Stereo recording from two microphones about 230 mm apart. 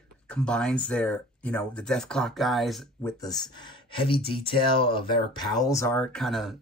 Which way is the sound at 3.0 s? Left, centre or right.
Centre.